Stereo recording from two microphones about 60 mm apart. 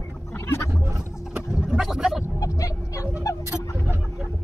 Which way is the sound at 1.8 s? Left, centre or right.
Centre.